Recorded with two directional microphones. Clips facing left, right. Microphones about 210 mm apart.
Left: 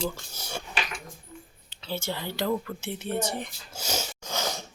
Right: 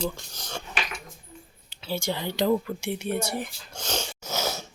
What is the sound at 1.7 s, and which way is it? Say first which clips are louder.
Speech: right 3 dB; 10° right (ahead or behind).